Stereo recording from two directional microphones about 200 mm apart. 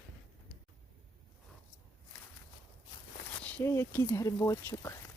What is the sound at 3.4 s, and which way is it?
Speech, 10° left (ahead or behind).